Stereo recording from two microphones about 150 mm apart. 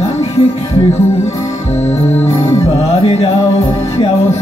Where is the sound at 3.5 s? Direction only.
45° left (ahead or behind).